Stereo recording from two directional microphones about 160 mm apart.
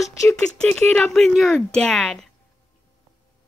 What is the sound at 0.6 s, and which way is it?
Speech, 5° left (ahead or behind).